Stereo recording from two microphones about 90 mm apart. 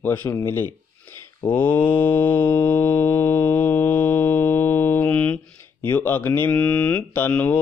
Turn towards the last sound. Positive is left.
turn(degrees=20)  # may be behind; listen again after turning